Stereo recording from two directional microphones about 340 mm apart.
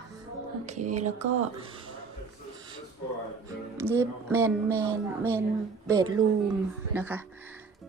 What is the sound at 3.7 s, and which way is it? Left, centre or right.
Speech, centre.